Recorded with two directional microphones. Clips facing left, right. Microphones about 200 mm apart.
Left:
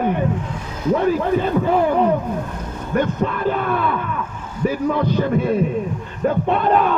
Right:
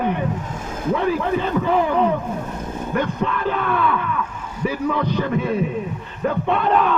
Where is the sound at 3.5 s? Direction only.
40° left (ahead or behind).